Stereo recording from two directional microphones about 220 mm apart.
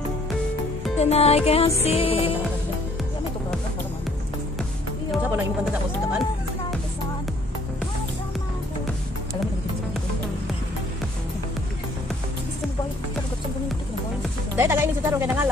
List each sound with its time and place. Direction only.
0.9 s music: 30° left (ahead or behind)
5.3 s speech: 5° right (ahead or behind)
14.6 s speech: 10° right (ahead or behind)